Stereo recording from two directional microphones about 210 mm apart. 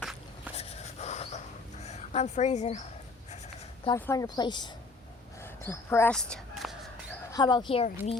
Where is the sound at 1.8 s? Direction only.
30° left (ahead or behind).